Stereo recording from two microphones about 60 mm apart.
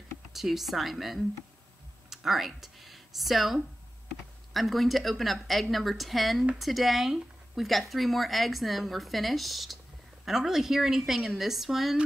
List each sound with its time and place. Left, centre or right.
0.3 s a woman's voice: centre